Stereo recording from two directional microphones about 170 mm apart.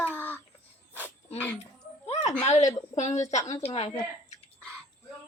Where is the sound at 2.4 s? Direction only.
40° left (ahead or behind).